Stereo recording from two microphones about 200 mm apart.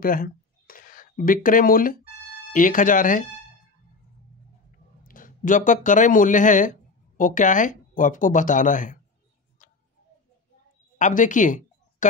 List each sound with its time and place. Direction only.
0.0 s a sound: 45° left (ahead or behind)
2.5 s speech: 40° left (ahead or behind)
5.0 s speech: 45° left (ahead or behind)
11.0 s speech: 40° left (ahead or behind)